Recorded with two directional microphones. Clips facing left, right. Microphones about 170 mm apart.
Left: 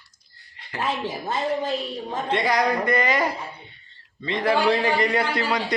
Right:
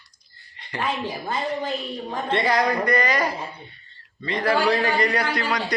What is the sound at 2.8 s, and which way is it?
A man's voice, 25° left (ahead or behind).